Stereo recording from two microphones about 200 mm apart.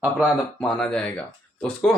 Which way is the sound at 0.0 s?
5° right (ahead or behind).